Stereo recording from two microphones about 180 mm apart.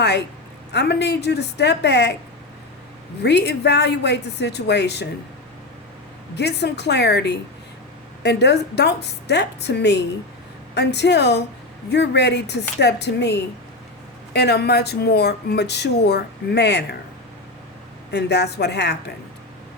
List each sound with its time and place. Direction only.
0.7 s speech: 70° left (ahead or behind)
3.2 s speech: 70° left (ahead or behind)
6.3 s speech: 70° left (ahead or behind)
18.1 s speech: 70° left (ahead or behind)